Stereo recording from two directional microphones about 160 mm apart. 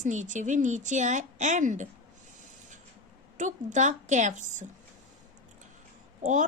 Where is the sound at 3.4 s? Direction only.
50° right (ahead or behind).